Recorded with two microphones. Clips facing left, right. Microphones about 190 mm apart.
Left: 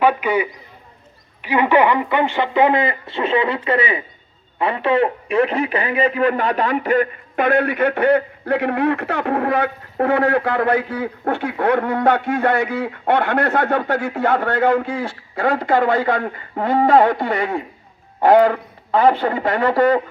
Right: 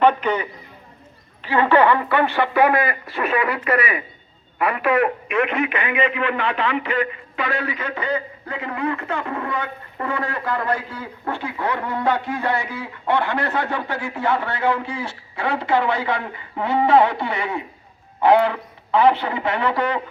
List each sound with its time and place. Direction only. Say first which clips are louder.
0.0 s a man's voice: left 1 dB; 10° left (ahead or behind); by 20.0 s 45° left (ahead or behind)